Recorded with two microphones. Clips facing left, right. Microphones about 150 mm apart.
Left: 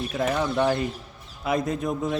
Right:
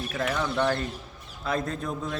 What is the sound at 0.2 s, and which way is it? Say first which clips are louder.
Speech: left 3 dB; 20° left (ahead or behind).